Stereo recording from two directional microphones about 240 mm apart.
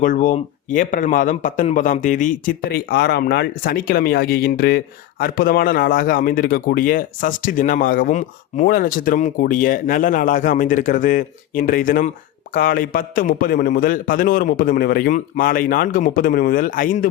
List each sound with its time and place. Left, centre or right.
0.0 s a man's voice: left